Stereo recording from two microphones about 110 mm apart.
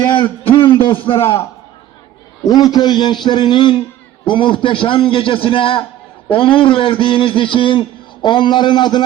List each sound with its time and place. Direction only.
0.1 s a man's voice: 50° left (ahead or behind)
2.5 s a man's voice: 40° left (ahead or behind)